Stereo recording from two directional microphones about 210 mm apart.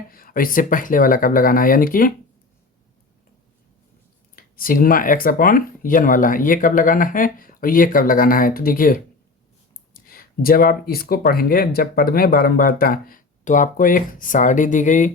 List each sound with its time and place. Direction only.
0.1 s speech: 45° left (ahead or behind)
4.4 s speech: 40° left (ahead or behind)